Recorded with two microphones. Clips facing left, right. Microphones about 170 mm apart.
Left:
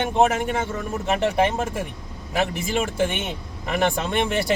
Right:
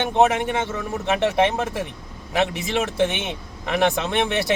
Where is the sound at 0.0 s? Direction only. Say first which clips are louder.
Right 1 dB; centre (ahead or behind).